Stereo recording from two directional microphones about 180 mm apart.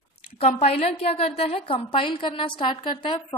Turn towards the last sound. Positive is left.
turn(degrees=25)  # may be behind; listen again after turning